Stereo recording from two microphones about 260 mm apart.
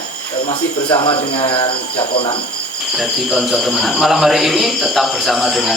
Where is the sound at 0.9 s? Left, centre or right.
Centre.